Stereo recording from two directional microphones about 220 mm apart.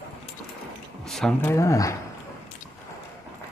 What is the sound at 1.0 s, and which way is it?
Speech, centre (ahead or behind).